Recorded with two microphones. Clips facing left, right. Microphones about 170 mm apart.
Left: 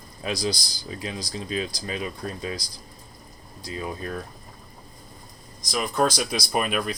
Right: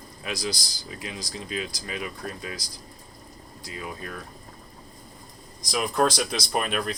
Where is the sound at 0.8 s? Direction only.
30° left (ahead or behind).